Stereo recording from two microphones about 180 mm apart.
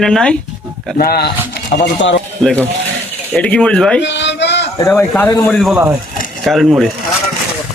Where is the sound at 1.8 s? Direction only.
90° left.